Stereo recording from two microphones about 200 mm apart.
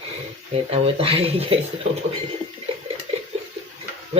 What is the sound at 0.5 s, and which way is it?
Speech, 30° right (ahead or behind).